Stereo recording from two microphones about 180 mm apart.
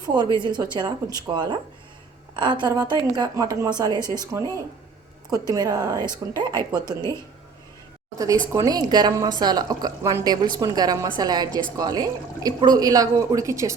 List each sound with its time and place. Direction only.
0.3 s a woman's voice: 25° right (ahead or behind)
8.5 s a woman's voice: 20° right (ahead or behind)